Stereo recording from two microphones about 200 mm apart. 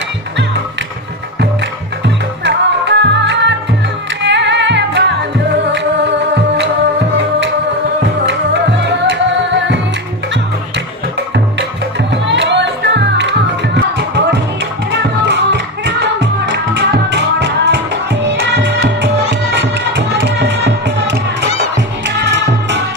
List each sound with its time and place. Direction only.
2.4 s music: 60° right (ahead or behind)
4.2 s singing: 60° right (ahead or behind)
8.0 s music: 60° right (ahead or behind)
12.0 s music: 60° right (ahead or behind)